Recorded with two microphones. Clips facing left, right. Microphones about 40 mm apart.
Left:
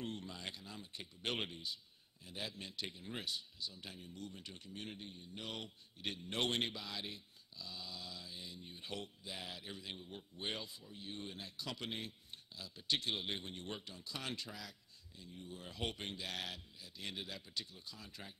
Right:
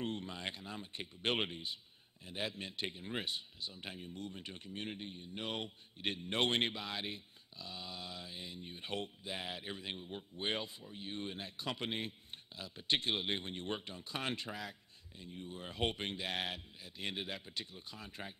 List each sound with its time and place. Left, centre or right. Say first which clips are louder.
0.0 s a man's voice: right 5 dB; right